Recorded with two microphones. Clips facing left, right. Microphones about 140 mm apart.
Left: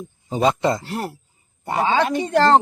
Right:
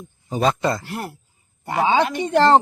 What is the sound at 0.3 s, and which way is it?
Speech, 20° left (ahead or behind).